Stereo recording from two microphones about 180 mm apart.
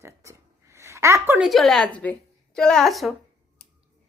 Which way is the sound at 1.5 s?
Centre (ahead or behind).